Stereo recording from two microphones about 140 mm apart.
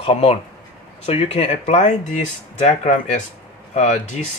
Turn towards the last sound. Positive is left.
turn(degrees=55)  # may be behind; listen again after turning